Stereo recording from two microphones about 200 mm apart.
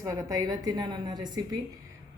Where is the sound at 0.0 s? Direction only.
15° right (ahead or behind).